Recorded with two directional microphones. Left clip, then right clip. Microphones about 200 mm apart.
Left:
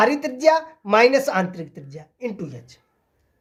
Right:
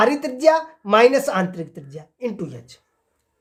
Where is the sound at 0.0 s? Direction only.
20° right (ahead or behind).